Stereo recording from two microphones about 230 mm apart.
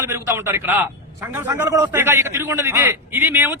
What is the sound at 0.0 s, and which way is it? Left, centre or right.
A man's voice, centre.